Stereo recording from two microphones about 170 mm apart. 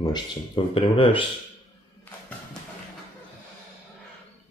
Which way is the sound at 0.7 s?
35° left (ahead or behind).